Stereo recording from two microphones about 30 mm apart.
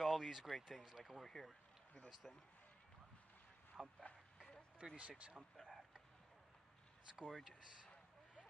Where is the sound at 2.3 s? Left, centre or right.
Left.